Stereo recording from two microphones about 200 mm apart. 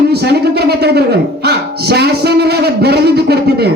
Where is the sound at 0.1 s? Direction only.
55° right (ahead or behind).